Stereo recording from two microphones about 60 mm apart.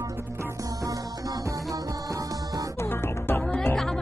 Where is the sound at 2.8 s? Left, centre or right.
Left.